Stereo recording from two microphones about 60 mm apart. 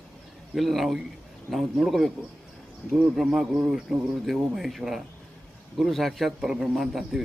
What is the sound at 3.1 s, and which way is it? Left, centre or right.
A man's voice, centre.